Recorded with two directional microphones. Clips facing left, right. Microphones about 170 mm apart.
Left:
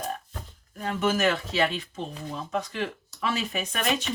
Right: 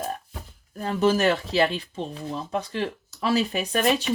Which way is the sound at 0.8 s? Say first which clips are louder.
Right 4 dB; 35° right (ahead or behind).